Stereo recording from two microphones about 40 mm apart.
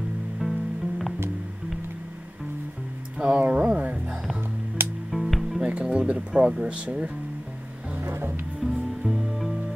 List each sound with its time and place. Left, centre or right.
0.4 s music: centre
3.3 s speech: right
3.9 s music: right
5.1 s music: centre
5.6 s speech: right
8.1 s music: right
8.6 s music: centre
9.0 s music: centre